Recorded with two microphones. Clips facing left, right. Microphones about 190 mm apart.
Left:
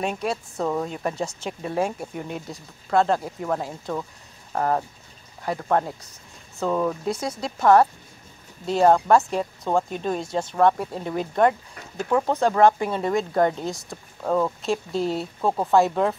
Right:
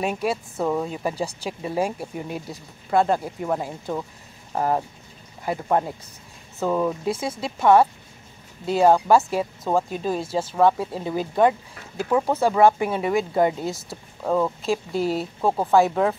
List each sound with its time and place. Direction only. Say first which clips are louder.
0.0 s speech: right 2 dB; 5° right (ahead or behind)